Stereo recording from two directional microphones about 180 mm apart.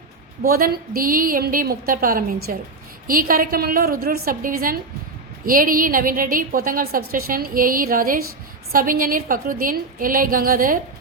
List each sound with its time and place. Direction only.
0.4 s a woman's voice: 55° right (ahead or behind)